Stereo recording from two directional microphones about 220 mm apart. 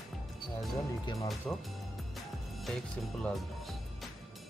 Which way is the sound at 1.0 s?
20° left (ahead or behind).